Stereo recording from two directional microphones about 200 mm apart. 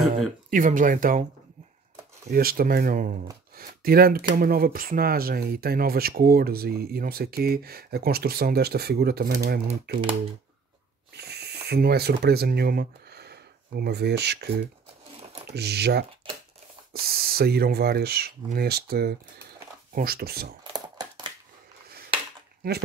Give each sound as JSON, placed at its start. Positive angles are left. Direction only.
{"t": 0.5, "sound": "speech", "side_deg": -40}
{"t": 2.3, "sound": "speech", "side_deg": -45}
{"t": 11.1, "sound": "speech", "side_deg": -55}
{"t": 20.7, "sound": "a sound", "side_deg": -20}